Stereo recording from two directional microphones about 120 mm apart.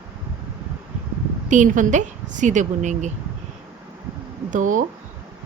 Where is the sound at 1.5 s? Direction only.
90° right.